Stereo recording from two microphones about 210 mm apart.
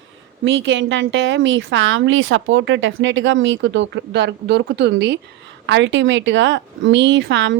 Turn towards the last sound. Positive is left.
turn(degrees=-60)  # may be behind; listen again after turning